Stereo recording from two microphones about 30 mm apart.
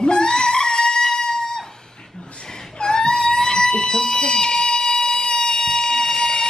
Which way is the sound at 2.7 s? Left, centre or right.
Left.